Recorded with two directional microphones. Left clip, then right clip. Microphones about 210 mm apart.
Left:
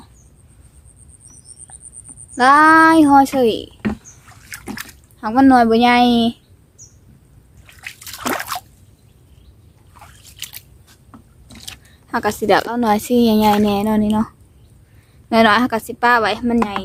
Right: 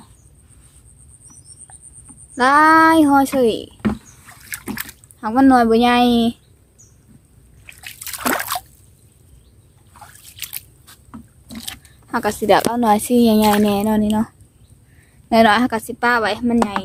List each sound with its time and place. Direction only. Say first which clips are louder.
2.3 s a child's voice: left 2 dB; centre (ahead or behind)
3.8 s a sound: right 1 dB; 20° right (ahead or behind)
5.2 s a child's voice: left 1 dB; centre (ahead or behind)
7.7 s trickle: left 2 dB; 15° right (ahead or behind)
8.0 s trickle: right 2 dB; 30° right (ahead or behind)
10.2 s drip: even; 20° right (ahead or behind)
11.1 s a sound: right 6 dB; 35° right (ahead or behind)
12.0 s a child's voice: even; centre (ahead or behind)